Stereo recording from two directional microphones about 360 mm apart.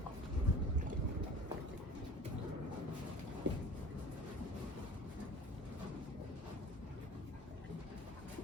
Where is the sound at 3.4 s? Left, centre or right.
Right.